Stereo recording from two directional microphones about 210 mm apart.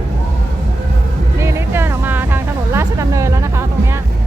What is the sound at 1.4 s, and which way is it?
Music, 15° right (ahead or behind).